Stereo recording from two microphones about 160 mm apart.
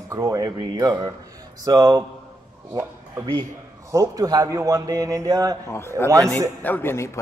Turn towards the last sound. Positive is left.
turn(degrees=15)  # may be behind; listen again after turning